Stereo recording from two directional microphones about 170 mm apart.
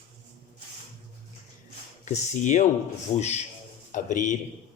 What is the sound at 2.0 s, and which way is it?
A man's voice, 45° left (ahead or behind).